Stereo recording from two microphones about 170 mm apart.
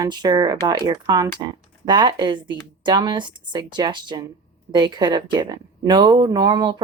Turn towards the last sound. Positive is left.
turn(degrees=-25)  # may be behind; listen again after turning